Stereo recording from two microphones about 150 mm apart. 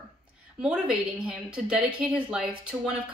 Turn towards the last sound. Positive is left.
turn(degrees=-10)  # may be behind; listen again after turning